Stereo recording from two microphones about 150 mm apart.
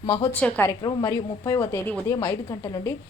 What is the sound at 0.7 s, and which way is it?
A woman's voice, 25° left (ahead or behind).